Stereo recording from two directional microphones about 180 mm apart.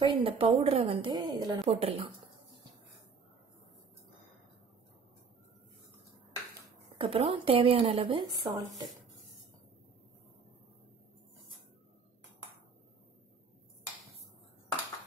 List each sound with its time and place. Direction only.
0.0 s a woman's voice: 30° right (ahead or behind)
7.0 s a woman's voice: 30° right (ahead or behind)